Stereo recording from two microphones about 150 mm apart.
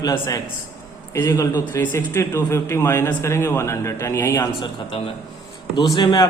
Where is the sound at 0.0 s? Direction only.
25° left (ahead or behind).